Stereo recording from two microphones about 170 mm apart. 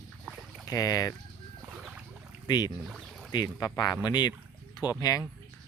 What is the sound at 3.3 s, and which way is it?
Speech, 25° left (ahead or behind).